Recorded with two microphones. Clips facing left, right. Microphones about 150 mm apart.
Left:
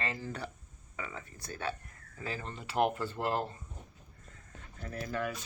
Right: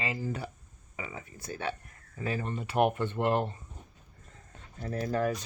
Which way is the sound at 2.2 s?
25° right (ahead or behind).